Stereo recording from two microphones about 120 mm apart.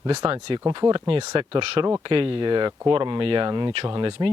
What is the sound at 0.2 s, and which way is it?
Speech, 45° right (ahead or behind).